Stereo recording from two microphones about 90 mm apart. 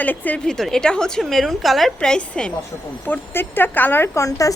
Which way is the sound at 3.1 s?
20° left (ahead or behind).